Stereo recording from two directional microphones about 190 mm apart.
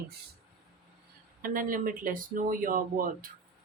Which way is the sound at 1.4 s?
45° right (ahead or behind).